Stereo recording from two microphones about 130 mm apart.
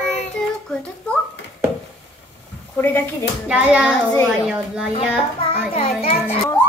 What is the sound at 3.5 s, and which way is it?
Speech, 10° right (ahead or behind).